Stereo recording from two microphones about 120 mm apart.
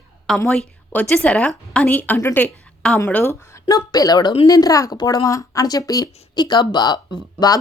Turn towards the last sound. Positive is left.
turn(degrees=-45)  # may be behind; listen again after turning